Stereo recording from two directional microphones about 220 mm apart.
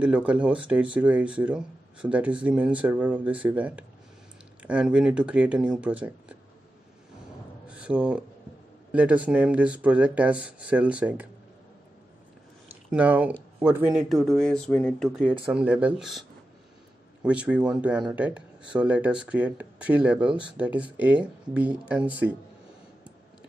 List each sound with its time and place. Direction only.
0.0 s speech: 5° right (ahead or behind)
7.7 s speech: 5° right (ahead or behind)
12.9 s speech: 5° right (ahead or behind)